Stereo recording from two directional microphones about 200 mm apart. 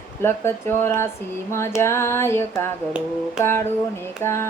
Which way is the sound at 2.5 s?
5° right (ahead or behind).